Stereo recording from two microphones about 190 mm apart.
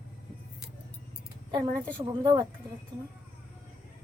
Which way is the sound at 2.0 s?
20° right (ahead or behind).